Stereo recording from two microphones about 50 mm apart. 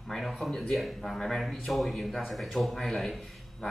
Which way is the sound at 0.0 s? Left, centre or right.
Centre.